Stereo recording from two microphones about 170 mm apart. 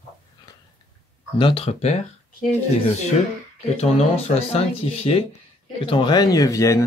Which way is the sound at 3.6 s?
40° left (ahead or behind).